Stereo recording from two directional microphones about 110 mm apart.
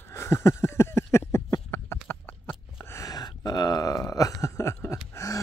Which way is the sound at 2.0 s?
15° left (ahead or behind).